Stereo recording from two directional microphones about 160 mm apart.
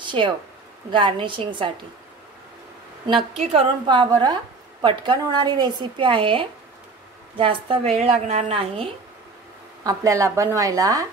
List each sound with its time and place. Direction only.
0.0 s a sound: 30° right (ahead or behind)
0.9 s a woman's voice: 30° right (ahead or behind)
3.5 s a woman's voice: 30° right (ahead or behind)
9.8 s a woman's voice: 20° right (ahead or behind)